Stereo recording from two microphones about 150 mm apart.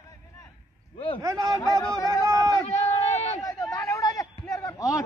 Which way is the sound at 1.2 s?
25° right (ahead or behind).